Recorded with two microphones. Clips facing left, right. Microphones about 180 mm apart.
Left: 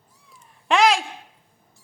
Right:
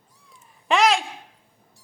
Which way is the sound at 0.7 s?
Centre (ahead or behind).